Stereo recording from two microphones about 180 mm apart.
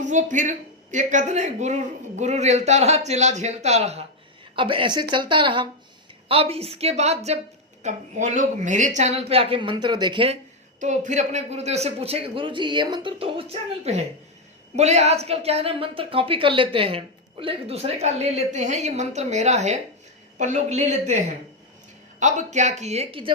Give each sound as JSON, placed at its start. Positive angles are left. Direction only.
{"t": 0.0, "sound": "a woman's voice", "side_deg": -40}
{"t": 10.8, "sound": "a woman's voice", "side_deg": -40}